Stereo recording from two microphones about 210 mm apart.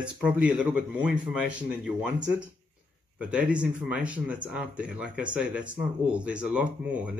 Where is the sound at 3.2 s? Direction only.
5° right (ahead or behind).